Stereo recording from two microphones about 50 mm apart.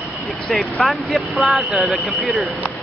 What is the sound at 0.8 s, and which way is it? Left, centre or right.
Speech, centre.